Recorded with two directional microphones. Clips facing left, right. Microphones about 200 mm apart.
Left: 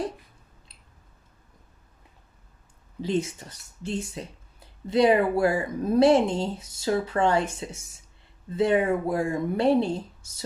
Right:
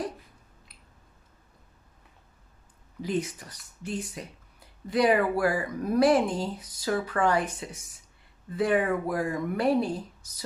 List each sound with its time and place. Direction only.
3.0 s speech: 25° left (ahead or behind)